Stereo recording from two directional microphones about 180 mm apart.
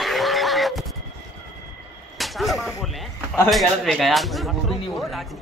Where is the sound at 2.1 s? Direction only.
Centre (ahead or behind).